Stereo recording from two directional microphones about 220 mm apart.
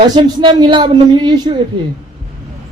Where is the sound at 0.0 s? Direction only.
20° right (ahead or behind).